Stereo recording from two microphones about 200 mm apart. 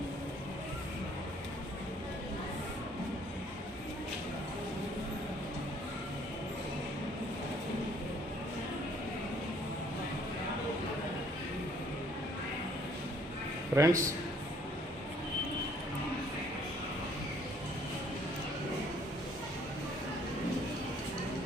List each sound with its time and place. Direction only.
13.7 s a man's voice: 15° right (ahead or behind)